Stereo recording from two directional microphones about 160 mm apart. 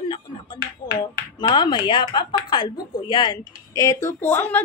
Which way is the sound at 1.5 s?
30° left (ahead or behind).